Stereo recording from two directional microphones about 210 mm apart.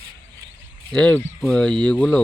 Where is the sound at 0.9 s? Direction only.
5° left (ahead or behind).